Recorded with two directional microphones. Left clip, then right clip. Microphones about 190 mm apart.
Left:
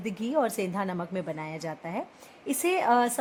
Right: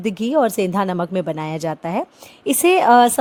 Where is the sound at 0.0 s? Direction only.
40° right (ahead or behind).